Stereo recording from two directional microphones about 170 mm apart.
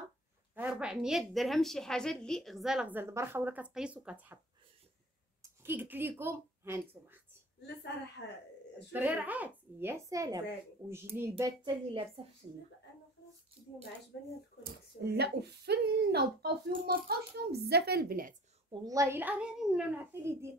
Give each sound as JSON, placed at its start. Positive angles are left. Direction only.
{"t": 0.6, "sound": "a woman's voice", "side_deg": -5}
{"t": 5.4, "sound": "a woman's voice", "side_deg": -15}
{"t": 8.9, "sound": "a woman's voice", "side_deg": -10}
{"t": 11.6, "sound": "a woman's voice", "side_deg": -35}
{"t": 14.6, "sound": "speech", "side_deg": -75}
{"t": 18.7, "sound": "a woman's voice", "side_deg": -20}
{"t": 20.1, "sound": "a woman's voice", "side_deg": -15}